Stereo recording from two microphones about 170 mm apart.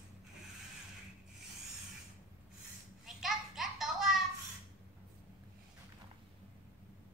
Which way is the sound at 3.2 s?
Centre (ahead or behind).